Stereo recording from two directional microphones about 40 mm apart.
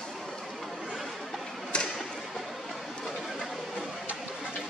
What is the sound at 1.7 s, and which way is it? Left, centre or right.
Tick-tock, left.